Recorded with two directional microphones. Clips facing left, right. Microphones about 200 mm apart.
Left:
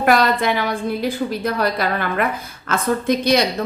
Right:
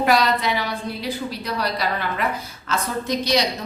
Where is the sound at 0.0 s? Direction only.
50° left (ahead or behind).